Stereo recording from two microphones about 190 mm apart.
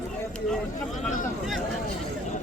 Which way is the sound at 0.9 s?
45° left (ahead or behind).